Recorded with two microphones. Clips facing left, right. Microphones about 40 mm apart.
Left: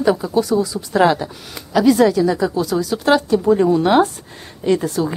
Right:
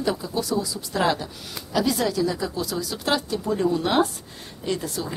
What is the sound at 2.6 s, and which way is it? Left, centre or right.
Speech, centre.